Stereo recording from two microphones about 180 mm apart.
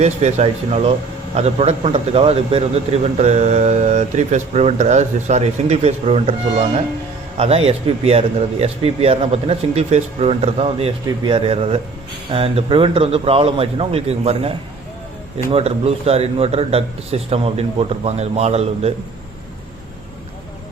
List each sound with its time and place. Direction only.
0.0 s a man's voice: 40° right (ahead or behind)